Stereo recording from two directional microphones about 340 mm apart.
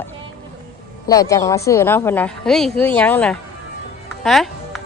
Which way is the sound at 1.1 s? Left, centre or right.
Centre.